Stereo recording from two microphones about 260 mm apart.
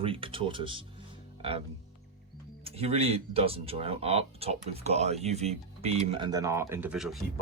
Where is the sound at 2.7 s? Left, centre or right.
Right; by 7.2 s centre.